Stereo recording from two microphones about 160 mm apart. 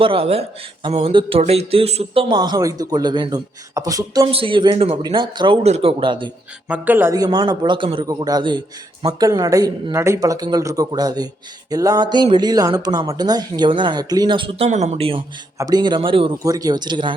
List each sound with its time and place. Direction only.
0.0 s speech: 35° right (ahead or behind)
4.3 s a man's voice: 35° right (ahead or behind)
6.7 s speech: 10° right (ahead or behind)
7.2 s speech: 25° right (ahead or behind)
14.7 s a man's voice: 45° right (ahead or behind)
15.5 s speech: 25° right (ahead or behind)
16.4 s speech: 20° right (ahead or behind)